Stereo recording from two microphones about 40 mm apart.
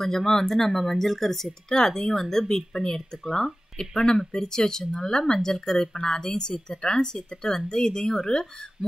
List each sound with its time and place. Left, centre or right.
0.0 s speech: centre